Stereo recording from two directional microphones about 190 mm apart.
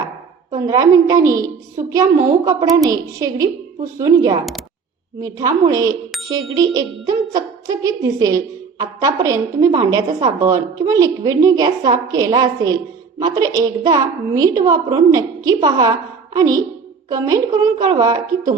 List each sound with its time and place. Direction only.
0.5 s a woman's voice: 20° right (ahead or behind)